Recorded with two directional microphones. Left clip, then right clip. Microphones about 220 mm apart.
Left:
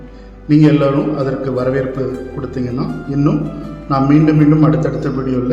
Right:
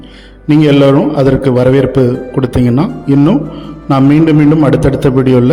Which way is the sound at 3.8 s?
40° right (ahead or behind).